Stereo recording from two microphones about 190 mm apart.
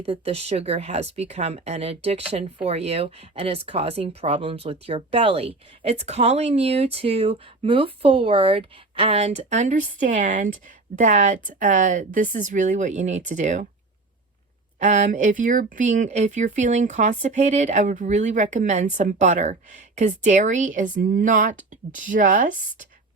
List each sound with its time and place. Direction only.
0.0 s speech: 30° right (ahead or behind)
14.8 s speech: 40° right (ahead or behind)